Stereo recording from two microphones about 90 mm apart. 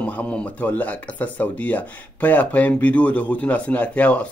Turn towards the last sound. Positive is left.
turn(degrees=15)  # may be behind; listen again after turning